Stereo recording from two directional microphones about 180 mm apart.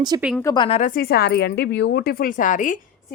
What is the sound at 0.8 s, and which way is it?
A woman's voice, 50° left (ahead or behind).